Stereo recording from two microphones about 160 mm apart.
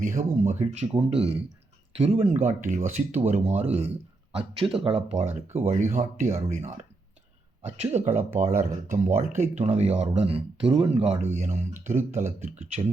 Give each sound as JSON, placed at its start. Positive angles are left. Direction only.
{"t": 0.0, "sound": "speech", "side_deg": -50}
{"t": 7.9, "sound": "speech", "side_deg": -50}